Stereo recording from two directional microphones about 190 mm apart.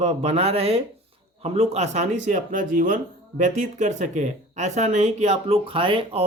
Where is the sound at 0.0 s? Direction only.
35° right (ahead or behind).